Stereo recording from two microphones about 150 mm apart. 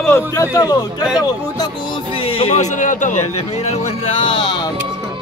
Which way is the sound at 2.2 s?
35° left (ahead or behind).